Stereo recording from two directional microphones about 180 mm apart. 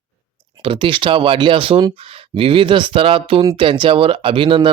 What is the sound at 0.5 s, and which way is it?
Speech, 30° right (ahead or behind).